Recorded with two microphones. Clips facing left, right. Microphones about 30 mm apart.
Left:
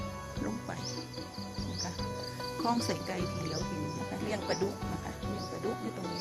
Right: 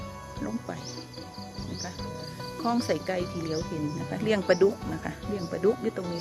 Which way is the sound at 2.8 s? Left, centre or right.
Centre.